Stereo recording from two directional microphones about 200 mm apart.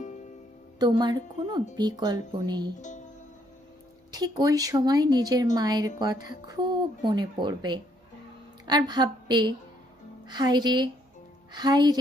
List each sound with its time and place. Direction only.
0.8 s speech: 20° right (ahead or behind)
4.1 s speech: 20° right (ahead or behind)